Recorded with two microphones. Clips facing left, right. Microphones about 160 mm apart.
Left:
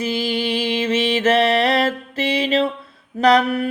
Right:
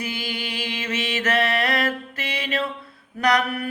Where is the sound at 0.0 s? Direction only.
25° left (ahead or behind).